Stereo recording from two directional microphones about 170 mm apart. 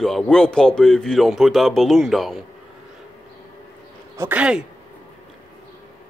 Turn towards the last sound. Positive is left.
turn(degrees=-5)  # may be behind; listen again after turning